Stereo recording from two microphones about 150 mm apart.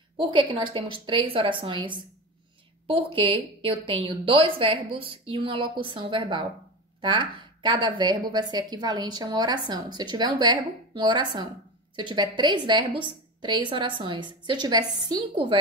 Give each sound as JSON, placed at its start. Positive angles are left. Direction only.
{"t": 0.2, "sound": "a woman's voice", "side_deg": -35}